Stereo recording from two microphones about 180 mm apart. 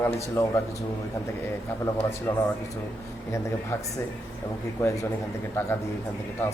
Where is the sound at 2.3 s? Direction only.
15° left (ahead or behind).